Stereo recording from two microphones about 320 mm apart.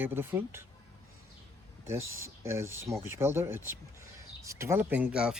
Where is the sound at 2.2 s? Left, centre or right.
Centre.